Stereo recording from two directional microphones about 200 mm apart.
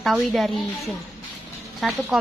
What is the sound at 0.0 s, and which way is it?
A woman's voice, centre (ahead or behind).